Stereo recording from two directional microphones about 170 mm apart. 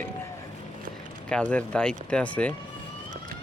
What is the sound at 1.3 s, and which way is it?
Speech, 10° left (ahead or behind).